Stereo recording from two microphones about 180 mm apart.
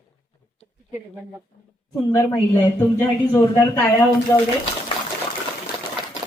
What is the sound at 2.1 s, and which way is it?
Speech, 15° left (ahead or behind).